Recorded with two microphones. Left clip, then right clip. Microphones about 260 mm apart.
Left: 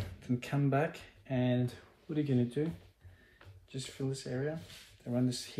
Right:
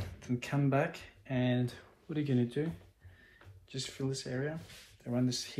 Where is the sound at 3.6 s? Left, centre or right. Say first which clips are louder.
Right 1 dB; right.